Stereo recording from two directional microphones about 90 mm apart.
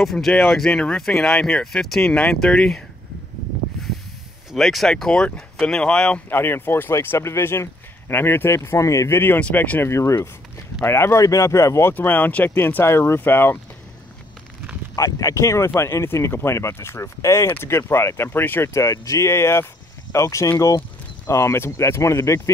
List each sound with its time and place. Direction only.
0.0 s speech: 5° left (ahead or behind)
4.5 s speech: centre (ahead or behind); by 11.9 s 35° left (ahead or behind)
11.9 s speech: 20° left (ahead or behind)
15.0 s speech: 35° left (ahead or behind)
18.7 s speech: 35° left (ahead or behind)